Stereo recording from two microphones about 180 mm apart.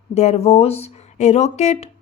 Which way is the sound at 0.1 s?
40° left (ahead or behind).